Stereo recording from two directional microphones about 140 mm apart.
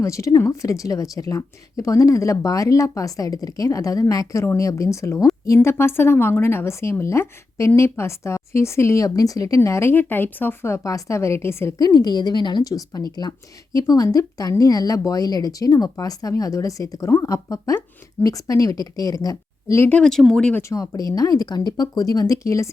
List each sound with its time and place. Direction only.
0.0 s a woman's voice: 20° left (ahead or behind)
20.0 s speech: 5° left (ahead or behind)
20.6 s a woman's voice: 20° left (ahead or behind)